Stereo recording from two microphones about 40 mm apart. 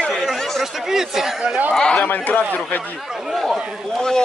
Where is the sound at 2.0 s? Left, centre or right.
Left.